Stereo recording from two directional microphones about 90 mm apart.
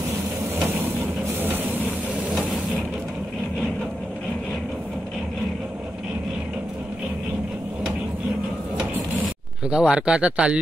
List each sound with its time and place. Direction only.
1.4 s vehicle: 20° right (ahead or behind)
8.7 s mechanisms: 10° right (ahead or behind)